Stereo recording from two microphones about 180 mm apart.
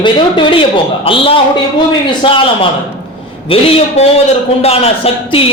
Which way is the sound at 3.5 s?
30° left (ahead or behind).